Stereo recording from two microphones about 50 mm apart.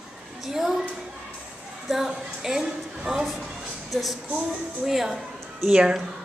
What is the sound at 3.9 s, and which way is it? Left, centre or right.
A woman's voice, centre.